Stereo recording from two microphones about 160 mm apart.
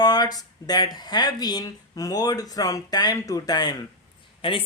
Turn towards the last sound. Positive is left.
turn(degrees=35)  # may be behind; listen again after turning